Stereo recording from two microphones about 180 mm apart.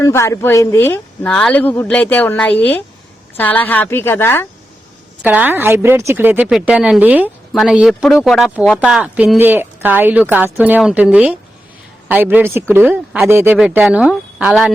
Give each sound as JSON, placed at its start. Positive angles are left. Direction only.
{"t": 0.0, "sound": "speech", "side_deg": 15}
{"t": 5.2, "sound": "a woman's voice", "side_deg": -10}